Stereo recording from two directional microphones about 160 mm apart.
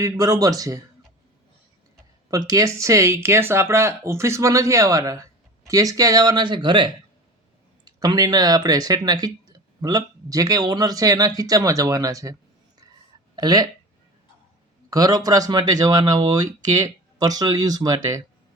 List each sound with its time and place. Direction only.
0.0 s speech: 20° right (ahead or behind)
2.5 s speech: 20° right (ahead or behind)
14.8 s speech: 25° right (ahead or behind)